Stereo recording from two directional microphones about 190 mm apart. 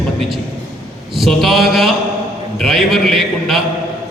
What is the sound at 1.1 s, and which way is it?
A man's voice, centre (ahead or behind).